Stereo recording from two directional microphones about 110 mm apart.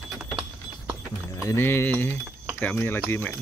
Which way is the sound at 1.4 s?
20° left (ahead or behind).